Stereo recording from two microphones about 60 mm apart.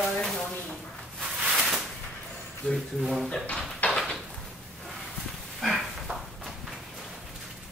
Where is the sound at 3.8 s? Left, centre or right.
Left.